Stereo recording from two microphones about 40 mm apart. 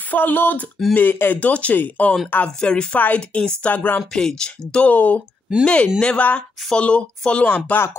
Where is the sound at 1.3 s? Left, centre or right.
Left.